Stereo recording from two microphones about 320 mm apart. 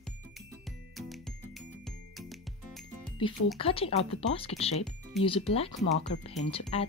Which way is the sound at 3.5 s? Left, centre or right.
Centre.